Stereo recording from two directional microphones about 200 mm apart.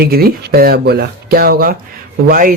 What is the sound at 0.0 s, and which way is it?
Speech, 50° right (ahead or behind).